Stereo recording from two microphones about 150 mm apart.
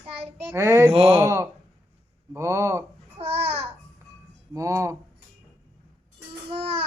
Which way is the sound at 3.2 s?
45° right (ahead or behind).